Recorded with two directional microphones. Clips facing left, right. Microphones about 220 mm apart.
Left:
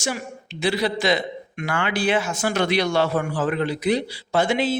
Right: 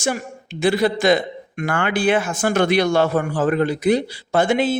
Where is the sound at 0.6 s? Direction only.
50° right (ahead or behind).